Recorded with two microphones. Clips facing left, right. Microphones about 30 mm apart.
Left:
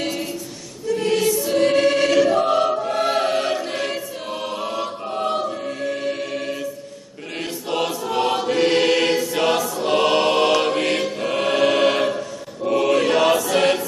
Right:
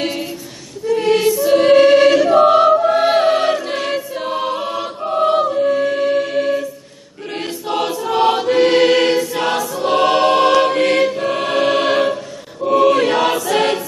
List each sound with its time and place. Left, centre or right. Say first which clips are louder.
0.0 s a capella: right 4 dB; centre
0.9 s choir: right 5 dB; right